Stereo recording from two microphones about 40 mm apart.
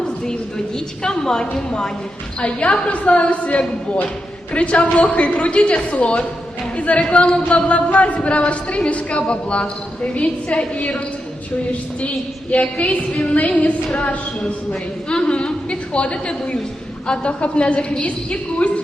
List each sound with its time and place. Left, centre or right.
1.0 s a woman's voice: centre
2.4 s a woman's voice: left
12.5 s a woman's voice: left
14.4 s a woman's voice: left